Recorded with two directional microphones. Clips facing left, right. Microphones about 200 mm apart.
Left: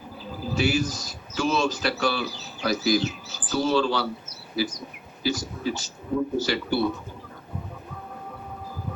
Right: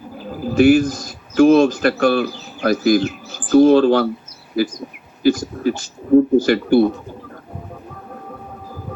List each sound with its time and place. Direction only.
0.3 s a man's voice: 55° right (ahead or behind)